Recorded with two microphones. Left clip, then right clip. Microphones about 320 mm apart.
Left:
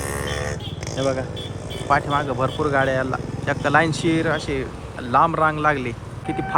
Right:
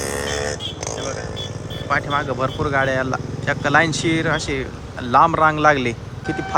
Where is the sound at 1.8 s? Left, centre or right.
Centre.